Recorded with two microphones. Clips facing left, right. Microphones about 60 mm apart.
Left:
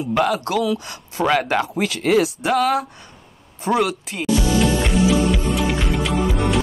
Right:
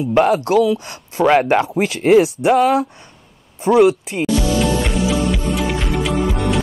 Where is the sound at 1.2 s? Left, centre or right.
Right.